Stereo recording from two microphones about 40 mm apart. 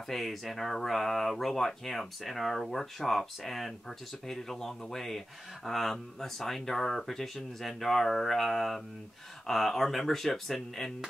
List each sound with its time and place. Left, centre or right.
0.1 s speech: centre